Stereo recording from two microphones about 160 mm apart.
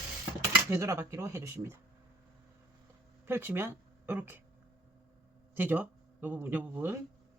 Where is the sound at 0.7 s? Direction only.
15° right (ahead or behind).